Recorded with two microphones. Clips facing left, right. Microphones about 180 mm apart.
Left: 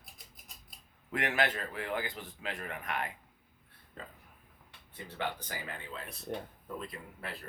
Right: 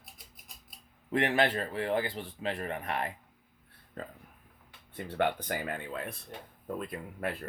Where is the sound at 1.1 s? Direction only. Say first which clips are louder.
Right 5 dB; 30° right (ahead or behind).